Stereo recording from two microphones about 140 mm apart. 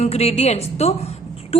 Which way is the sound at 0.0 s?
50° left (ahead or behind).